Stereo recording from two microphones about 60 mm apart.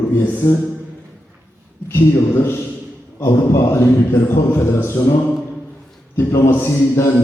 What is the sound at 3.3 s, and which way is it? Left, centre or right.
A man's voice, left.